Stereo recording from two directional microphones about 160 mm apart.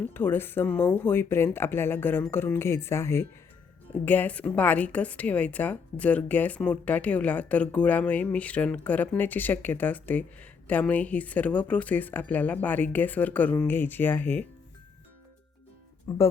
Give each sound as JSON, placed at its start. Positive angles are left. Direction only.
{"t": 0.0, "sound": "a woman's voice", "side_deg": 10}
{"t": 16.0, "sound": "a woman's voice", "side_deg": 15}